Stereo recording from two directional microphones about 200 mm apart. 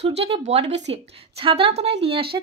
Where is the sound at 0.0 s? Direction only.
30° right (ahead or behind).